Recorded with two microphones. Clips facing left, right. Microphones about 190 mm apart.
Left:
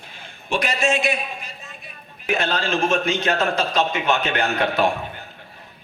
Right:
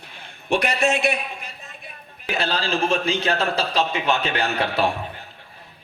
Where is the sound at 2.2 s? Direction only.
35° right (ahead or behind).